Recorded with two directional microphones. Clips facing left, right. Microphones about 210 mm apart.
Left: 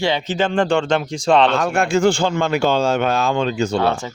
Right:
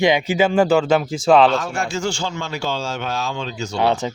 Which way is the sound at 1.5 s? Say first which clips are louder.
Left 5 dB; 60° left (ahead or behind).